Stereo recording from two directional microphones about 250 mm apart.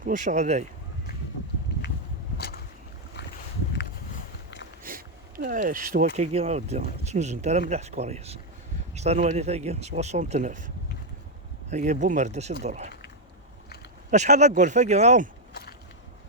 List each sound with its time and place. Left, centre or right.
0.0 s speech: right
4.8 s speech: right
11.7 s speech: right
14.1 s speech: right